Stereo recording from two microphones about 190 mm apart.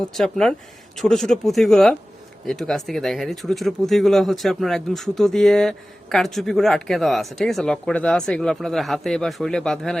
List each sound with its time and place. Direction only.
0.1 s speech: centre (ahead or behind)